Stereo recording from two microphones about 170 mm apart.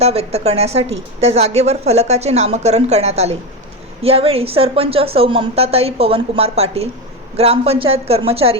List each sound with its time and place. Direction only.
0.0 s a woman's voice: 40° right (ahead or behind)